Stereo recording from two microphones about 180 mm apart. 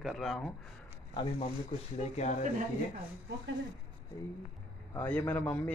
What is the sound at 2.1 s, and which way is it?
Speech, 40° left (ahead or behind).